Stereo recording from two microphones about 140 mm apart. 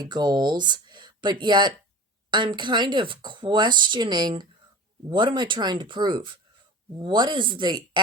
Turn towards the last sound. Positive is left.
turn(degrees=-35)  # may be behind; listen again after turning